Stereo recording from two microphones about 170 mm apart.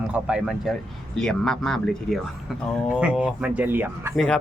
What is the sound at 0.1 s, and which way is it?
Speech, 5° right (ahead or behind).